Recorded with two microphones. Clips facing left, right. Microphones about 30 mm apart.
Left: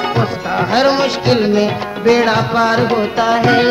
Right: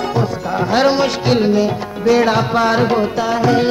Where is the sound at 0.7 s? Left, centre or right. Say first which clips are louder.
Even; centre.